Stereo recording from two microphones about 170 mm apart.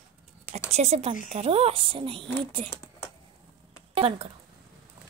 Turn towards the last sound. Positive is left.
turn(degrees=-35)  # may be behind; listen again after turning